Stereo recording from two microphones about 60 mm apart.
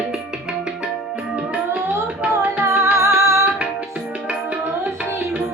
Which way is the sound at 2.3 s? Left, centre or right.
Right.